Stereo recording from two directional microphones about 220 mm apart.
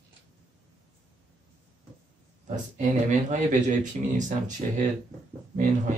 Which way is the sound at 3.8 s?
35° right (ahead or behind).